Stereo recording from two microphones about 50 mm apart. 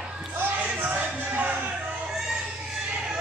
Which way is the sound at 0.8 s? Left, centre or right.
Right.